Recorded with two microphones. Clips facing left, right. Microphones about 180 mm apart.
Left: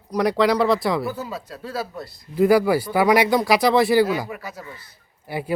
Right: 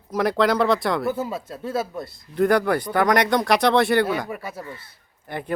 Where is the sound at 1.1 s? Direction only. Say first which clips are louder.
Right 4 dB; 25° right (ahead or behind).